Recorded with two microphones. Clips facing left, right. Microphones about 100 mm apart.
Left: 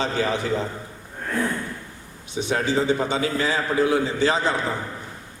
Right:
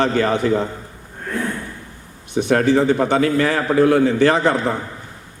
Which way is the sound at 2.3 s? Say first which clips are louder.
Right 8 dB; 55° right (ahead or behind).